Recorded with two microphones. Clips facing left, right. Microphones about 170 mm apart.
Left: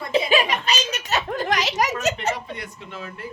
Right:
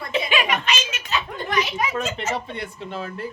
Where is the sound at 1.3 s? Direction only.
90° left.